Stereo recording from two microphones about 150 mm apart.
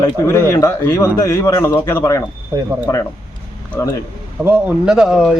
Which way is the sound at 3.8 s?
20° left (ahead or behind).